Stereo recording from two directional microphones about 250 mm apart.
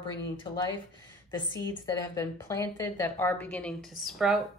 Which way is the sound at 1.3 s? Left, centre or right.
Centre.